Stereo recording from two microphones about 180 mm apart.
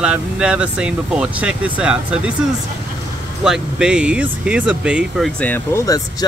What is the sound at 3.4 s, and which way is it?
Speech, 5° right (ahead or behind).